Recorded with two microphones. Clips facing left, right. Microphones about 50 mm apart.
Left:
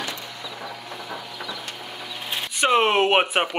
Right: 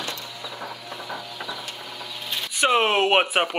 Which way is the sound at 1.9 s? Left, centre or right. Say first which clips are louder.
Left 2 dB; left.